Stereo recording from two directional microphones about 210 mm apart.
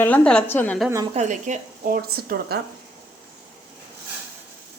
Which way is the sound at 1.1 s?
35° right (ahead or behind).